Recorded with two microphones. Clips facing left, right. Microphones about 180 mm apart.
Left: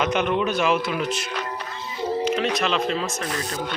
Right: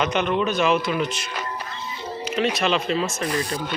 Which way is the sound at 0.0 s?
5° left (ahead or behind).